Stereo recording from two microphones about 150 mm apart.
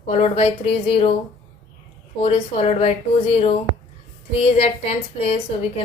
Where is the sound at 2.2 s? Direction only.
40° left (ahead or behind).